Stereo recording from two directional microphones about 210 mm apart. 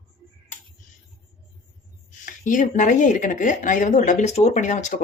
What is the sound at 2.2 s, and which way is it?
Speech, 40° left (ahead or behind).